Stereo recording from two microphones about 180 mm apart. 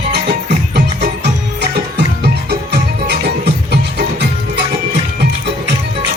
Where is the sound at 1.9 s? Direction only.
60° right (ahead or behind).